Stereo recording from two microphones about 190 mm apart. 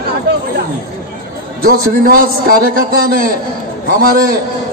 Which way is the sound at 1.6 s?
50° right (ahead or behind).